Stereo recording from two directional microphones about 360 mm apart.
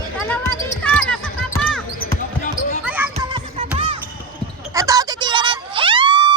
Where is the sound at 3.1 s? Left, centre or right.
Centre.